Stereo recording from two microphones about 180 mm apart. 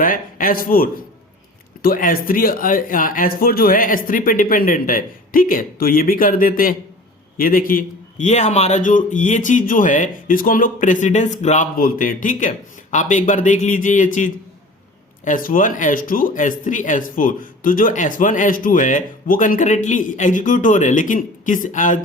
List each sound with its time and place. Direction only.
0.0 s a man's voice: 50° left (ahead or behind)